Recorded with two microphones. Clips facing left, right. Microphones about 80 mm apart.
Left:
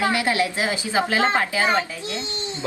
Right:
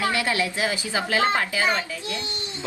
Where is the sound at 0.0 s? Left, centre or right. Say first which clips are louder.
Left 3 dB; left.